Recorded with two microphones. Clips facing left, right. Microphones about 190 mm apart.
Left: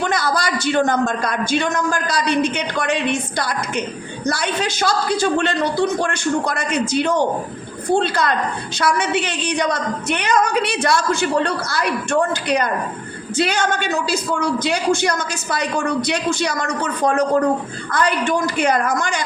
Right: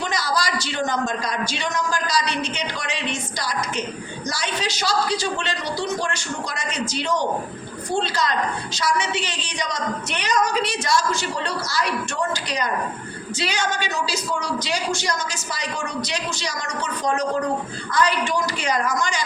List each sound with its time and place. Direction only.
0.0 s a man's voice: 55° left (ahead or behind)